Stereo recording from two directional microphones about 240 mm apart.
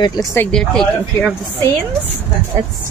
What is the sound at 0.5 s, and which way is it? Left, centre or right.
Speech, centre.